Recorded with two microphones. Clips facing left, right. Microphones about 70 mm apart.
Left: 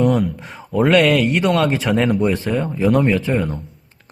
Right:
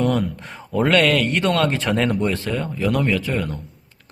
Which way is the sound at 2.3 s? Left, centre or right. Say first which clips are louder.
Left 4 dB; centre.